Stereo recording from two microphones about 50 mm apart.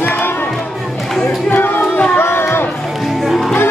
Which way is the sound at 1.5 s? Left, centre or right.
Left.